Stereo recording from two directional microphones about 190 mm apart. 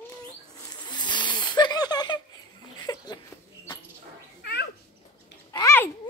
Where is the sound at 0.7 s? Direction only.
20° left (ahead or behind).